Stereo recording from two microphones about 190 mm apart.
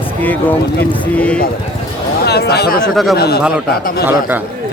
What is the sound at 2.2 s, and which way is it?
Speech, 60° left (ahead or behind).